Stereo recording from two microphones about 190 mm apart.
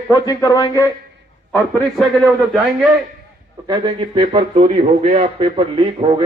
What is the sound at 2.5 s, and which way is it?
Speech, centre (ahead or behind).